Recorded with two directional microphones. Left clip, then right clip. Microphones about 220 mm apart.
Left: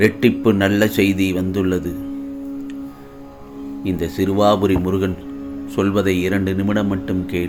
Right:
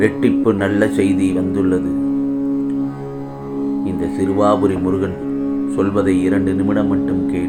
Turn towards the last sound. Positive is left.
turn(degrees=45)  # may be behind; listen again after turning